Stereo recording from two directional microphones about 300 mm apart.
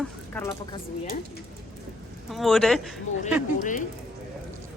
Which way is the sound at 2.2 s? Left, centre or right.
Centre.